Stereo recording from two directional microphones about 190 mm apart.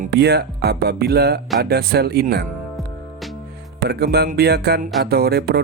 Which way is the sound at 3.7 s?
60° right (ahead or behind).